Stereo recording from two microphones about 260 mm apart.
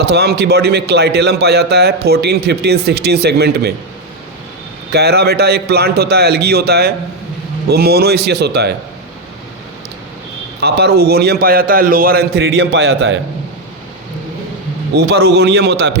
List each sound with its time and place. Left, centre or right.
0.1 s a man's voice: right
4.9 s a man's voice: right
10.6 s a man's voice: right
14.9 s a man's voice: right